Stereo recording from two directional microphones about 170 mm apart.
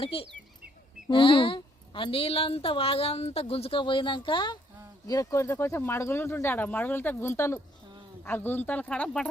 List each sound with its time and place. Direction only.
0.0 s a woman's voice: 35° left (ahead or behind); by 9.2 s 5° left (ahead or behind)